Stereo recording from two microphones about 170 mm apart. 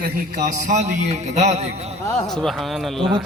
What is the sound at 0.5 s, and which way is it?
A man's voice, 45° right (ahead or behind).